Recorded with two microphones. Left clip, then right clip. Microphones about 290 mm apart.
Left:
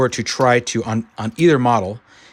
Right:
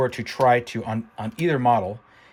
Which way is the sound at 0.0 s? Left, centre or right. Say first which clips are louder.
Left 4 dB; left.